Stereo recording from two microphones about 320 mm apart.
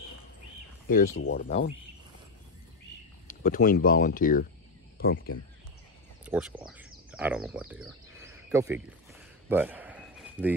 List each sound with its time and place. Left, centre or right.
0.8 s speech: left
3.3 s speech: left
6.2 s speech: centre
9.5 s a sound: centre